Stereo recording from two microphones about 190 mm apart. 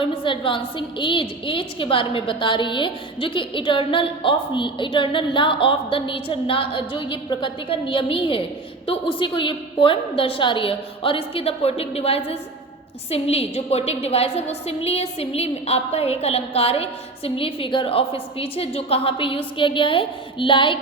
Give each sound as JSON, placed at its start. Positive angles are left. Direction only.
{"t": 0.0, "sound": "a woman's voice", "side_deg": 25}